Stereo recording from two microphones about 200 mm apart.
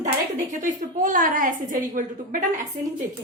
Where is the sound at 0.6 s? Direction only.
40° right (ahead or behind).